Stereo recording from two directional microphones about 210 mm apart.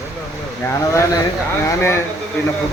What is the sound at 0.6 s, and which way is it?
A man's voice, 15° left (ahead or behind).